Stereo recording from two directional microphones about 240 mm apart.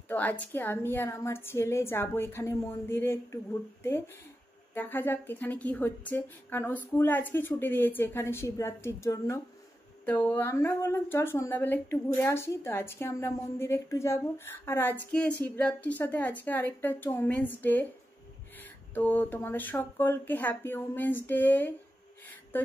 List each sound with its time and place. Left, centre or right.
0.1 s speech: centre